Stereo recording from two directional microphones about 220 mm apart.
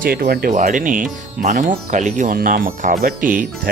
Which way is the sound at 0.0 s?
45° right (ahead or behind).